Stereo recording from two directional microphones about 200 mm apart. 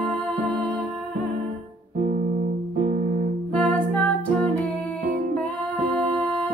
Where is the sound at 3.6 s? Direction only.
5° left (ahead or behind).